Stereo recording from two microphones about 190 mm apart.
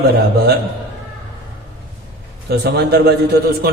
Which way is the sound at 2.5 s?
60° right (ahead or behind).